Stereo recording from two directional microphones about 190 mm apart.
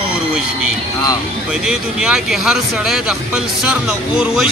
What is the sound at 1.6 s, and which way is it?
Speech, 5° right (ahead or behind).